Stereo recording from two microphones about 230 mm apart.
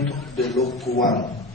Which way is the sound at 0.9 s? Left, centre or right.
Left.